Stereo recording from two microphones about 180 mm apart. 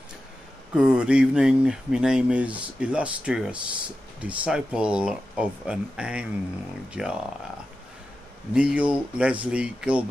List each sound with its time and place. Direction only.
0.7 s speech: 5° right (ahead or behind)
8.5 s speech: 5° right (ahead or behind)